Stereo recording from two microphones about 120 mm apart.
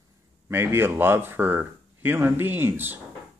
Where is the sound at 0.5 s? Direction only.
20° right (ahead or behind).